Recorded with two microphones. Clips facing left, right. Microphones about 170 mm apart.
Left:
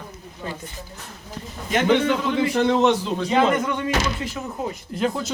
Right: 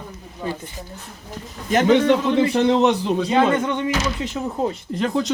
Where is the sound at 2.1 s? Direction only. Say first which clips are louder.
Right 4 dB; 25° right (ahead or behind).